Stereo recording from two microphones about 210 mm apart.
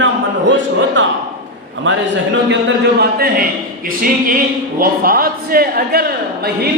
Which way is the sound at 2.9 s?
45° right (ahead or behind).